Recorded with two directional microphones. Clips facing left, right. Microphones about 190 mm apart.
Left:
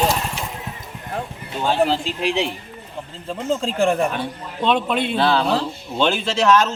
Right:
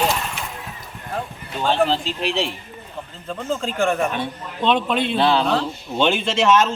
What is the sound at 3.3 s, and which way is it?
Speech, 25° left (ahead or behind).